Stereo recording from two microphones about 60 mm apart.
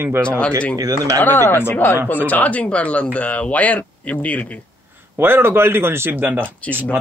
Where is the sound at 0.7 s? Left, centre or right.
Right.